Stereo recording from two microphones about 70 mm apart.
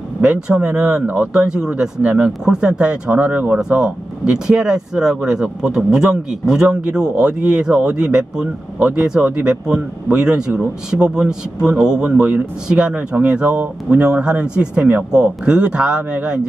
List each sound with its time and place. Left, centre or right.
0.2 s speech: centre